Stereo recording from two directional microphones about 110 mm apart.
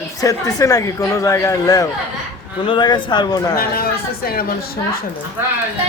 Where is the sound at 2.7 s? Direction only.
45° left (ahead or behind).